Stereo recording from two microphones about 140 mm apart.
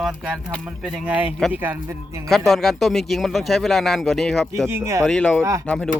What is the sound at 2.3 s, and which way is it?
A man's voice, centre (ahead or behind).